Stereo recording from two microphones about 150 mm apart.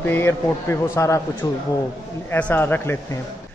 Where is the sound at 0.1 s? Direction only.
15° left (ahead or behind).